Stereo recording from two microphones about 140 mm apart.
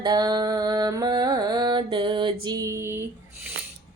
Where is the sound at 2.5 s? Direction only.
25° right (ahead or behind).